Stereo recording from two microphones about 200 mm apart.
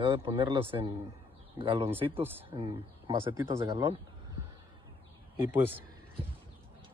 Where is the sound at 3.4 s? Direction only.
15° right (ahead or behind).